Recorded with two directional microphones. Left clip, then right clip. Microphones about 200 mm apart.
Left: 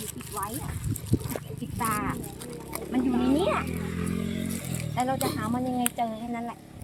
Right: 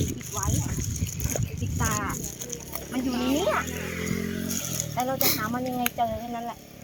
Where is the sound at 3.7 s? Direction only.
45° left (ahead or behind).